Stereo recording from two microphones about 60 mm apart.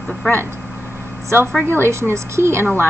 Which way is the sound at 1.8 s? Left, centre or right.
Right.